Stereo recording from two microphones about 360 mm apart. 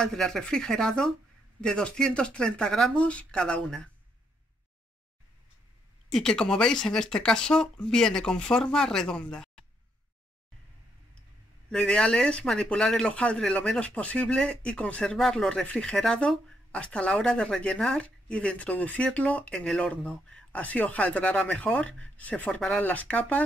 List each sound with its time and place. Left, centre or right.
0.0 s speech: centre
6.1 s speech: centre
11.7 s speech: centre
21.8 s speech: right
22.1 s speech: centre